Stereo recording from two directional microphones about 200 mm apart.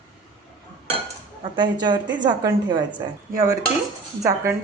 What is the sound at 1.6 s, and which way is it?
A woman's voice, 20° right (ahead or behind).